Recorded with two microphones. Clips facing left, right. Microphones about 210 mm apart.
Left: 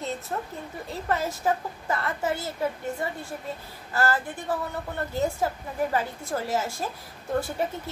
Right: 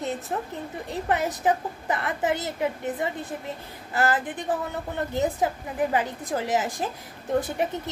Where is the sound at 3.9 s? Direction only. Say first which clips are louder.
Right 1 dB; 20° right (ahead or behind).